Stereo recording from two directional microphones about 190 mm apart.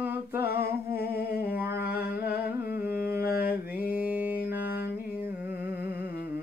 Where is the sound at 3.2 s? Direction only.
50° left (ahead or behind).